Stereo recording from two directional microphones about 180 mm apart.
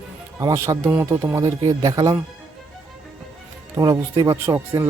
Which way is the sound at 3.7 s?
20° right (ahead or behind).